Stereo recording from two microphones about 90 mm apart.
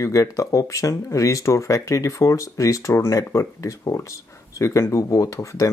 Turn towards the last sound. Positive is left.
turn(degrees=35)  # may be behind; listen again after turning